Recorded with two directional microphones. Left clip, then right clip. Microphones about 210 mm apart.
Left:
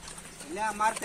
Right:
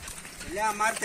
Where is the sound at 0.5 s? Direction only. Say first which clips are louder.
Right 1 dB; 45° left (ahead or behind).